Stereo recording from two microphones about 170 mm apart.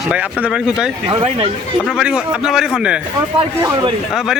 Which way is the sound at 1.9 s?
5° right (ahead or behind).